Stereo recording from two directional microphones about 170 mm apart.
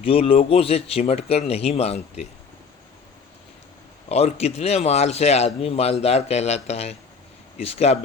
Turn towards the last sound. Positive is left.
turn(degrees=35)  # may be behind; listen again after turning